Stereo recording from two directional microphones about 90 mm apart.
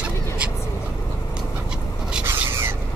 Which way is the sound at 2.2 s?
25° right (ahead or behind).